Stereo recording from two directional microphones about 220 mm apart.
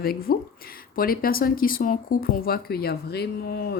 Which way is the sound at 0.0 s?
45° left (ahead or behind).